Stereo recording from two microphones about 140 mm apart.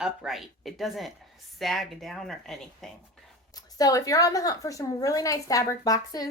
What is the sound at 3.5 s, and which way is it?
Speech, 25° left (ahead or behind).